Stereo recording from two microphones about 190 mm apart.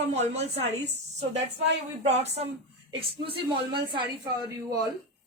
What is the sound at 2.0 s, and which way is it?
A man's voice, 35° right (ahead or behind).